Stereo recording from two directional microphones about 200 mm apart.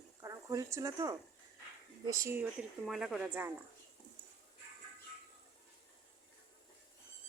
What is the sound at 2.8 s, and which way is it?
Speech, centre (ahead or behind).